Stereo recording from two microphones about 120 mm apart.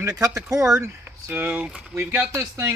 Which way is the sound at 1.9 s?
20° right (ahead or behind).